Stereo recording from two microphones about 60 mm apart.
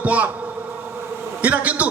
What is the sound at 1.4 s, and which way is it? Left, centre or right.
Speech, right.